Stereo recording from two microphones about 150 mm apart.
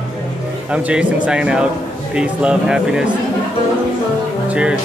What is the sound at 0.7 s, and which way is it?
Speech, 5° right (ahead or behind).